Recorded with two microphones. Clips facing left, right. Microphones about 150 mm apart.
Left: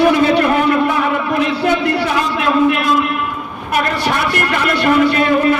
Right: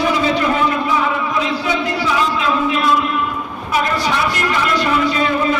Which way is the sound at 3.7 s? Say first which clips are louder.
Left 1 dB; 60° left (ahead or behind).